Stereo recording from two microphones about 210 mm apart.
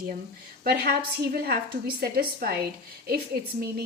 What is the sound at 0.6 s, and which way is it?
A woman's voice, 45° right (ahead or behind).